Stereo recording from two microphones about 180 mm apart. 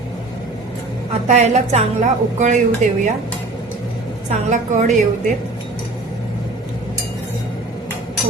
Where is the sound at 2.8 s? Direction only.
40° right (ahead or behind).